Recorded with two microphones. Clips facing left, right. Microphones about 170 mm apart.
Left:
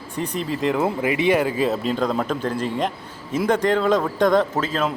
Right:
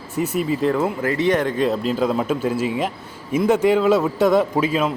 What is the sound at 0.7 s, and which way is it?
A man's voice, 15° left (ahead or behind).